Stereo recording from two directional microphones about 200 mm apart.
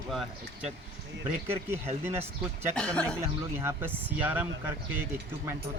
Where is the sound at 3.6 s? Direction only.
10° right (ahead or behind).